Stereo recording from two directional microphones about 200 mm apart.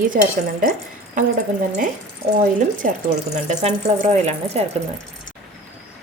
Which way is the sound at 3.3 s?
35° right (ahead or behind).